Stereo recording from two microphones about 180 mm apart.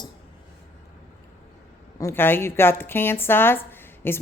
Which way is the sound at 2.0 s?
15° left (ahead or behind).